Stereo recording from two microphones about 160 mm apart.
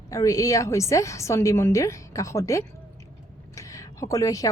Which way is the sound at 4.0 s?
20° left (ahead or behind).